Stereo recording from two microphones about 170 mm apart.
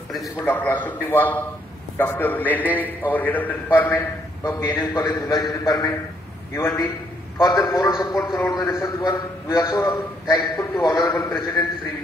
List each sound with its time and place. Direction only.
0.4 s a man's voice: 10° left (ahead or behind)